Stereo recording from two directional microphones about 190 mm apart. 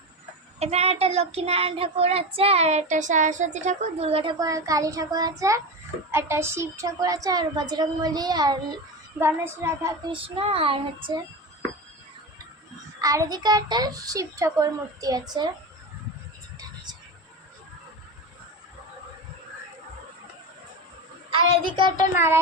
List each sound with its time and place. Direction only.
0.6 s child singing: 35° right (ahead or behind); by 5.6 s 15° right (ahead or behind)
6.1 s a woman's voice: 15° right (ahead or behind)
9.1 s child singing: 15° right (ahead or behind)
10.2 s a woman's voice: 30° right (ahead or behind)
13.0 s a woman's voice: 15° right (ahead or behind)
21.8 s a woman's voice: 25° right (ahead or behind)
22.1 s child singing: 15° right (ahead or behind)